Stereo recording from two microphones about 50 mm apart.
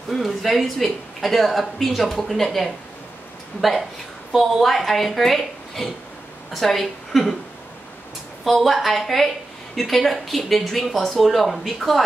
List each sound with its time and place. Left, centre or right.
0.1 s speech: centre
4.3 s speech: centre
8.5 s speech: centre